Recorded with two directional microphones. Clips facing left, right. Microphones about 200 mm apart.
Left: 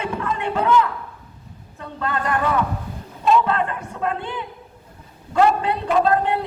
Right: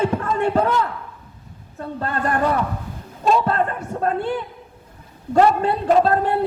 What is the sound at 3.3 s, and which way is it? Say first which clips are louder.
A woman's voice: even; 40° right (ahead or behind).